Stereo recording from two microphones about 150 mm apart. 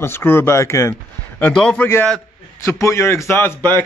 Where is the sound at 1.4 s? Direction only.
5° left (ahead or behind).